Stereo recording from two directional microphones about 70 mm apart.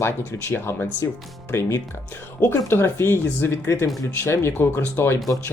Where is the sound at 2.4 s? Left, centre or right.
Left.